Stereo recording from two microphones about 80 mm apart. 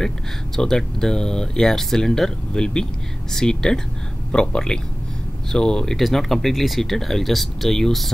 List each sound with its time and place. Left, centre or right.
0.6 s speech: centre